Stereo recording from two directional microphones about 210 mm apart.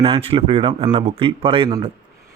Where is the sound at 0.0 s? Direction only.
25° right (ahead or behind).